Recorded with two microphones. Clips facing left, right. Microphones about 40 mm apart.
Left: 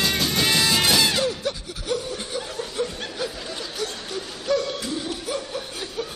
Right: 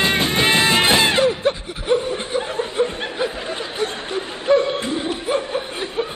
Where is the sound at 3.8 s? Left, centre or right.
Right.